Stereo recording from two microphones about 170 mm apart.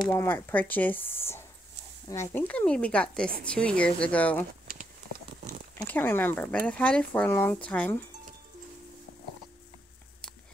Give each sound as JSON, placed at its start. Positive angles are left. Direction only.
{"t": 0.1, "sound": "speech", "side_deg": 15}
{"t": 5.1, "sound": "a sound", "side_deg": -65}
{"t": 5.9, "sound": "speech", "side_deg": 10}